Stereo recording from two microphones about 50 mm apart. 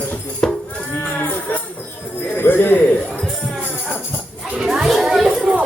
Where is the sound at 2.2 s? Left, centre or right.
Left.